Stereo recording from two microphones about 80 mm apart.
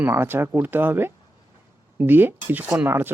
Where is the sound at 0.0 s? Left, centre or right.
Right.